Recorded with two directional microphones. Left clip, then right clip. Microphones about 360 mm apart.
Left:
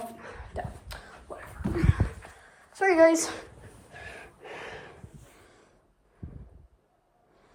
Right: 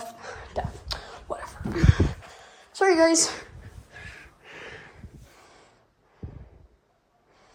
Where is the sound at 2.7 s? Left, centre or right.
Centre.